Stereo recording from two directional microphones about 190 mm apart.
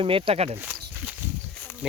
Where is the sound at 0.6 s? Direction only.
10° right (ahead or behind).